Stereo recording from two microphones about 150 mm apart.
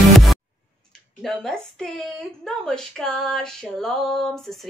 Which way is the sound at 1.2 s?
5° left (ahead or behind).